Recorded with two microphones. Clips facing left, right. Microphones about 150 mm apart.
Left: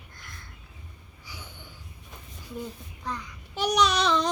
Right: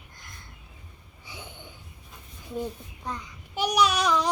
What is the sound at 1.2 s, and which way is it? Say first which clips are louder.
Wheeze: right 3 dB; 25° right (ahead or behind).